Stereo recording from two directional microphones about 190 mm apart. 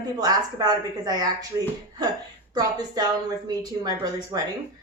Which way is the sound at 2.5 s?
20° right (ahead or behind).